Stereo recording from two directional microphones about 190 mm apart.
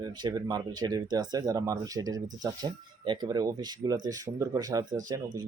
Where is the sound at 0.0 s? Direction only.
25° right (ahead or behind).